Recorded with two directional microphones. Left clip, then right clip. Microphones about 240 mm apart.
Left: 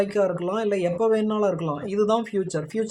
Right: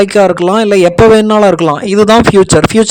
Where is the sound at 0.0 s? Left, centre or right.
Right.